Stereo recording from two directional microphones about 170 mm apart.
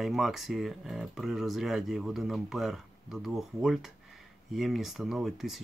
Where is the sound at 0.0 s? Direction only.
Centre (ahead or behind).